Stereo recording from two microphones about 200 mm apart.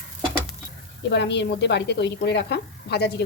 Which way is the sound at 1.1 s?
60° left (ahead or behind).